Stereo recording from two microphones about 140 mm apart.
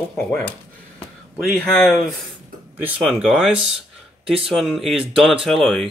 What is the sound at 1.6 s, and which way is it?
Speech, 10° left (ahead or behind).